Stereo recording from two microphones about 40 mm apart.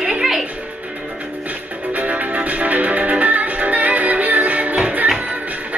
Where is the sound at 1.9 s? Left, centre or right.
Right.